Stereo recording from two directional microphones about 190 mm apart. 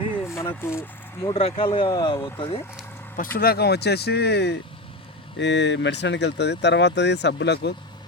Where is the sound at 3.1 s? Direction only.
50° left (ahead or behind).